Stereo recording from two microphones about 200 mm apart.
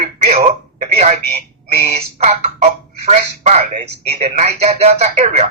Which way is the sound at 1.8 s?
30° right (ahead or behind).